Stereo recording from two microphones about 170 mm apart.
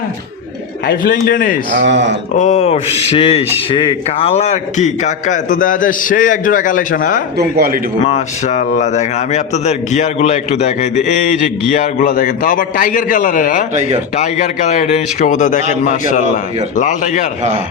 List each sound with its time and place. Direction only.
0.9 s a man's voice: 55° left (ahead or behind)
1.8 s speech: 90° right
2.3 s a man's voice: 45° left (ahead or behind)
7.3 s a man's voice: 65° right (ahead or behind)
8.0 s a man's voice: 45° left (ahead or behind)